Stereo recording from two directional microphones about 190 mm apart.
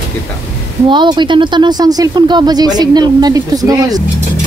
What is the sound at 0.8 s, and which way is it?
Speech, 25° right (ahead or behind).